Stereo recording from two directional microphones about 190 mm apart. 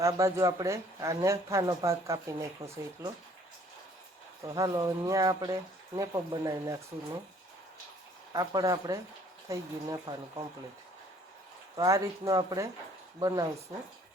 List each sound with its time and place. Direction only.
0.0 s speech: 15° right (ahead or behind)
4.4 s speech: 15° right (ahead or behind)
8.3 s speech: 20° right (ahead or behind)
11.8 s speech: 15° right (ahead or behind)